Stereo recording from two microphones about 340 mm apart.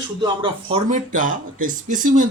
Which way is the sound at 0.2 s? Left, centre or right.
Centre.